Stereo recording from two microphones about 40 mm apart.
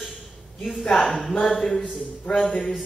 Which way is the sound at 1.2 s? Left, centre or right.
Centre.